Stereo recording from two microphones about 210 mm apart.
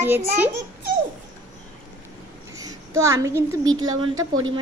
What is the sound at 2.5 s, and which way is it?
A woman's voice, 15° right (ahead or behind).